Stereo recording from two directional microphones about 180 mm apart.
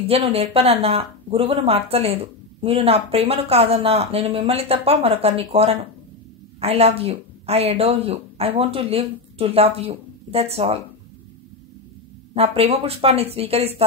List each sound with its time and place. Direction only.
0.0 s speech: 35° right (ahead or behind)
12.4 s speech: 30° right (ahead or behind)